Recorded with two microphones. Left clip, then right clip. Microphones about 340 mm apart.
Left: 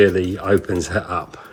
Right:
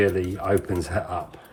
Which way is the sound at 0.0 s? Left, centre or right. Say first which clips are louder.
Left 7 dB; centre.